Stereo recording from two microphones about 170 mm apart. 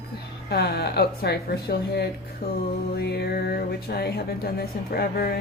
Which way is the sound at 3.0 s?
75° left (ahead or behind).